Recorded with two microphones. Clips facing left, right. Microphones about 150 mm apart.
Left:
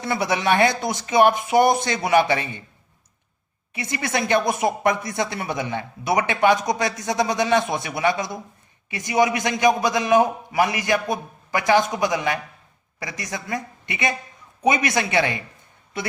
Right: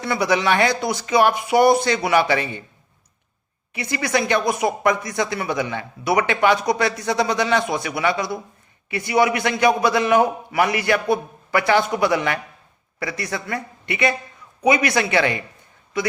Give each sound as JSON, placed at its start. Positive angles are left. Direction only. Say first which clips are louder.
{"t": 0.0, "sound": "speech", "louder": "right 2 dB", "side_deg": 20}
{"t": 3.8, "sound": "a man's voice", "louder": "right 3 dB", "side_deg": 25}